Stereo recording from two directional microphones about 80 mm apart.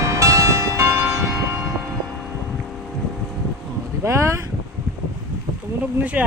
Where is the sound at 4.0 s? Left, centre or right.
Right.